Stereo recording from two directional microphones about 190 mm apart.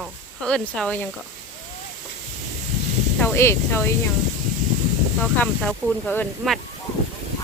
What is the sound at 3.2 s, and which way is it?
Speech, 10° left (ahead or behind).